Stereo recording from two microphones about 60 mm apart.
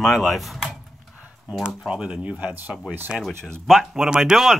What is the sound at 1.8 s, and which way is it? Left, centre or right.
Speech, centre.